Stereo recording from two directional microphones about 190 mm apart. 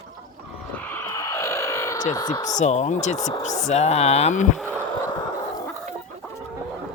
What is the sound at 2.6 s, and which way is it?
Speech, 40° left (ahead or behind).